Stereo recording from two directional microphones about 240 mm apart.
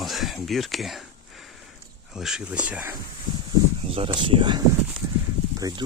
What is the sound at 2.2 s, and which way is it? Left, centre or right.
Speech, centre.